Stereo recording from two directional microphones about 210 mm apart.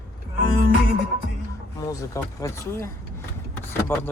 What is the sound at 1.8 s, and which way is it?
Speech, 15° left (ahead or behind).